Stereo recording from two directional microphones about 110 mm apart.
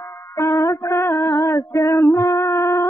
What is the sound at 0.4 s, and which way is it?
Music, 25° left (ahead or behind).